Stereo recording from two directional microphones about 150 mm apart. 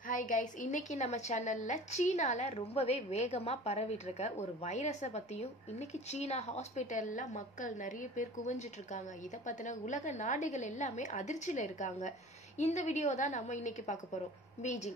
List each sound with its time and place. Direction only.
0.1 s a woman's voice: 60° left (ahead or behind)